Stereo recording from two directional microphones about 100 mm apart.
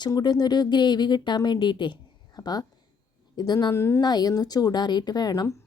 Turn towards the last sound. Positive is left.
turn(degrees=40)  # may be behind; listen again after turning